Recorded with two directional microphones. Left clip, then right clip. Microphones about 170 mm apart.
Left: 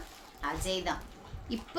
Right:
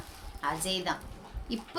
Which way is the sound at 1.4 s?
25° right (ahead or behind).